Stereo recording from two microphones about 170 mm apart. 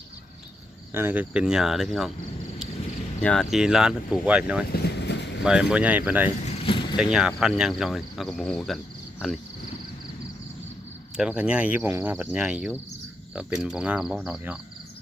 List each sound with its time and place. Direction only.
0.9 s speech: 10° right (ahead or behind)
3.2 s speech: 5° left (ahead or behind)
4.7 s vehicle: 75° left (ahead or behind)
5.4 s speech: 5° right (ahead or behind)
6.4 s vehicle: 35° left (ahead or behind)
6.9 s speech: 5° right (ahead or behind)
11.2 s speech: 5° right (ahead or behind)